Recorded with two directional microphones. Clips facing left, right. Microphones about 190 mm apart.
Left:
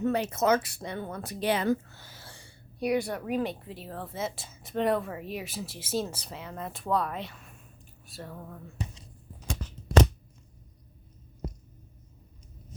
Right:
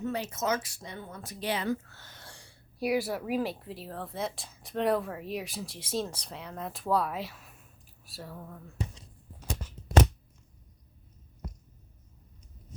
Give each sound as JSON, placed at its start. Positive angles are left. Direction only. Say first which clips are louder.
{"t": 0.0, "sound": "speech", "louder": "left 6 dB", "side_deg": 60}
{"t": 1.9, "sound": "speech", "louder": "left 2 dB", "side_deg": 10}